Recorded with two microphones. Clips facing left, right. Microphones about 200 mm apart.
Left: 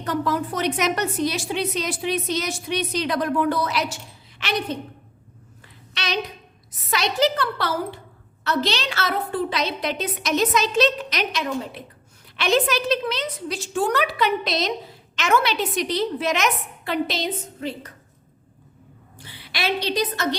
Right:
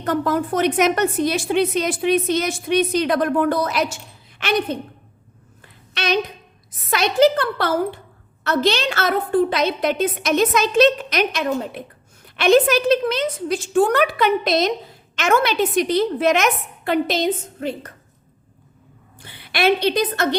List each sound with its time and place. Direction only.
0.0 s a woman's voice: 50° right (ahead or behind)
5.9 s a sound: 50° right (ahead or behind)
6.9 s a woman's voice: 50° right (ahead or behind)
19.2 s a woman's voice: 55° right (ahead or behind)